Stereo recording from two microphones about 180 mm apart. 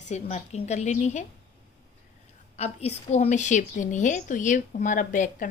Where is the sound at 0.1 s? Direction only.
40° left (ahead or behind).